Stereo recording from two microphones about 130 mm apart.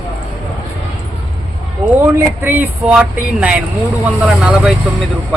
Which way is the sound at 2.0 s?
20° right (ahead or behind).